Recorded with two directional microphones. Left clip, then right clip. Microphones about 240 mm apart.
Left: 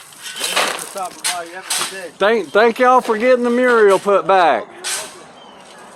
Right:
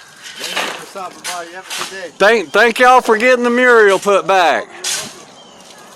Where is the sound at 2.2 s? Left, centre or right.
Right.